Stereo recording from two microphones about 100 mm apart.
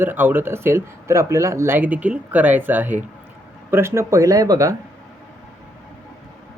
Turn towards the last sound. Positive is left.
turn(degrees=-35)  # may be behind; listen again after turning